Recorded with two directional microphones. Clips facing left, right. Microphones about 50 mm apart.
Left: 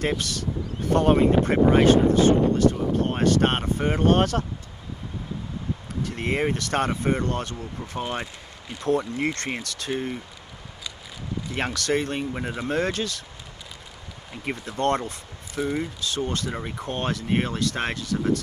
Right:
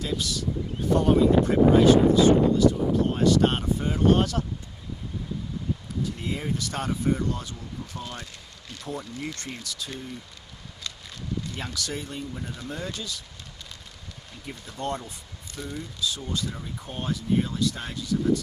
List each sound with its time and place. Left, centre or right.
0.0 s speech: left
5.9 s speech: left
11.5 s speech: left
14.4 s speech: left